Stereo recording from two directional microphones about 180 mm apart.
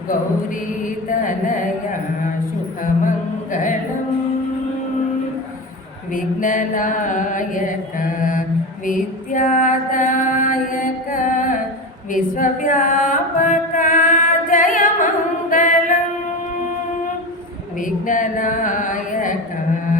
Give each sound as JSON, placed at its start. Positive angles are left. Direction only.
{"t": 1.1, "sound": "mantra", "side_deg": 45}
{"t": 3.5, "sound": "mantra", "side_deg": 45}
{"t": 6.1, "sound": "mantra", "side_deg": 45}
{"t": 17.7, "sound": "a sound", "side_deg": 45}